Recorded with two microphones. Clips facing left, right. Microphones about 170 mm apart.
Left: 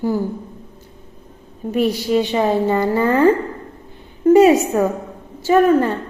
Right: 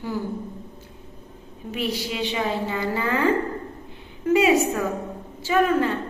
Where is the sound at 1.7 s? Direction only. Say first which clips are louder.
Left 11 dB; 45° left (ahead or behind).